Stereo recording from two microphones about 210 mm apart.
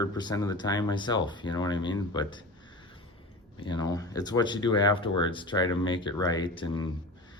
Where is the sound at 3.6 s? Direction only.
20° left (ahead or behind).